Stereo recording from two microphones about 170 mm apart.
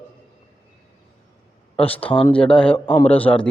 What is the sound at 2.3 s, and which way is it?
Speech, 5° left (ahead or behind).